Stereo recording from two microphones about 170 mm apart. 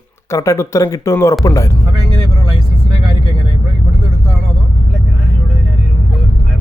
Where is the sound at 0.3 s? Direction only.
15° left (ahead or behind).